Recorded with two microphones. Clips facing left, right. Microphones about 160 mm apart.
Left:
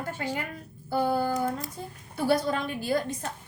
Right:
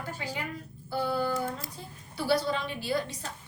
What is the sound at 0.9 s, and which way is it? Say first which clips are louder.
A woman's voice: left 3 dB; 45° left (ahead or behind).